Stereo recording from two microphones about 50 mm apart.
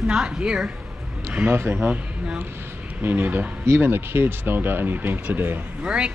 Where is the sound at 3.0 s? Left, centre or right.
Right.